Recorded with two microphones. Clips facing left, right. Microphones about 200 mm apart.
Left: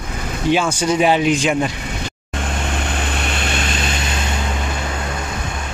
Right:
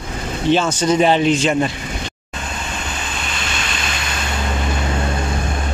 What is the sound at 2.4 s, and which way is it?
Vehicle, 60° left (ahead or behind).